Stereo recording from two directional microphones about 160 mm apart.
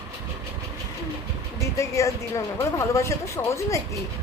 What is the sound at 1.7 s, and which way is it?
A woman's voice, 20° left (ahead or behind).